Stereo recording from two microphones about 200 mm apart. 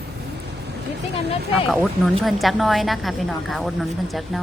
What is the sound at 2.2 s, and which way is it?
A woman's voice, centre (ahead or behind).